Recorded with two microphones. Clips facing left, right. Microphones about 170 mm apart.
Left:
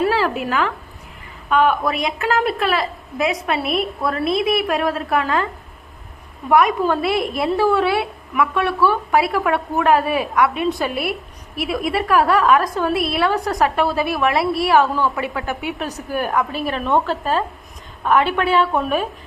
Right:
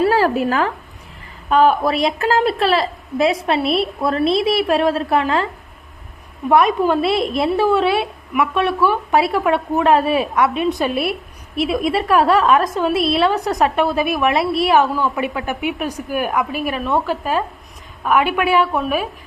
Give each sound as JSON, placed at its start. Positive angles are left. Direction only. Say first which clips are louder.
{"t": 0.1, "sound": "a woman's voice", "louder": "right 4 dB", "side_deg": -40}
{"t": 6.5, "sound": "a woman's voice", "louder": "right 1 dB", "side_deg": -25}